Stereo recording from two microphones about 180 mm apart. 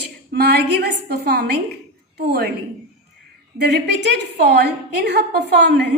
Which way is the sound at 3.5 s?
70° right (ahead or behind).